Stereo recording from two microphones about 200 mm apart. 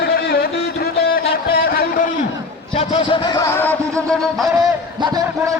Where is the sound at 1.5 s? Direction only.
45° left (ahead or behind).